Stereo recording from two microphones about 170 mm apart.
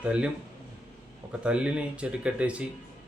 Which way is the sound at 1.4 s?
5° right (ahead or behind).